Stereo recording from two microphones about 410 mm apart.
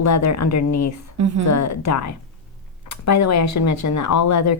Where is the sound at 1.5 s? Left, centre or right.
Left.